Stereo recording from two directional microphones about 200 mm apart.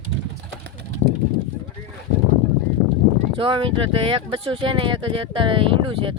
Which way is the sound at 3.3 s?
25° right (ahead or behind).